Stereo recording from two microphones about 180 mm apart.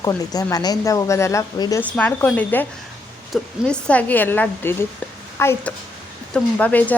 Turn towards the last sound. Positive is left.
turn(degrees=10)  # may be behind; listen again after turning